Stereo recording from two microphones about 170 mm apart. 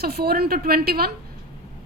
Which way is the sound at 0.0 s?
65° right (ahead or behind).